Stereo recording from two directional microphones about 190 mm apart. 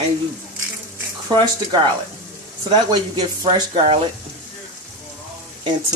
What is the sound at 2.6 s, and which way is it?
Speech, 25° right (ahead or behind).